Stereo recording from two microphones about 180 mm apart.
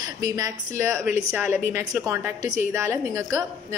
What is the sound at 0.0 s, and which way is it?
Speech, 20° right (ahead or behind).